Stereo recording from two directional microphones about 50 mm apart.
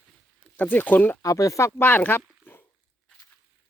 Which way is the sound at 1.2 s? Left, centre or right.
Left.